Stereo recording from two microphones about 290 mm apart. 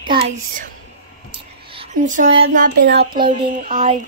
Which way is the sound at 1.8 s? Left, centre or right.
Right.